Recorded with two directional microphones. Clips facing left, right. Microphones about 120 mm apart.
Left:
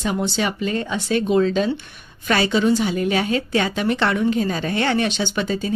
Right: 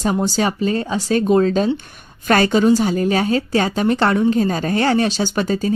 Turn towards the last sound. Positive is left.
turn(degrees=-40)  # may be behind; listen again after turning